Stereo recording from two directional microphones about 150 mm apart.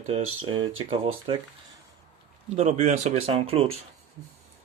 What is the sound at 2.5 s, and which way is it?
Speech, 45° right (ahead or behind).